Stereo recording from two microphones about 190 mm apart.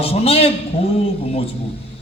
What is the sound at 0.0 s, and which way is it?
A man's voice, 30° left (ahead or behind).